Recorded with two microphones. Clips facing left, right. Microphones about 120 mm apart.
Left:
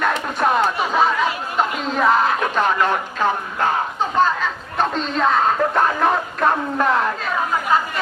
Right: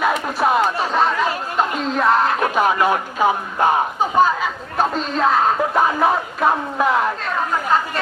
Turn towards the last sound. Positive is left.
turn(degrees=0)  # may be behind; listen again after turning